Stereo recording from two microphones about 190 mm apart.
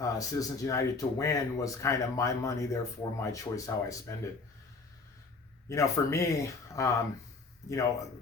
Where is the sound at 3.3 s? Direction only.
15° left (ahead or behind).